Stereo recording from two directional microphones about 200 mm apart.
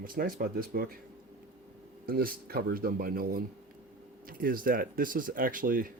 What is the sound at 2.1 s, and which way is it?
Speech, 45° right (ahead or behind).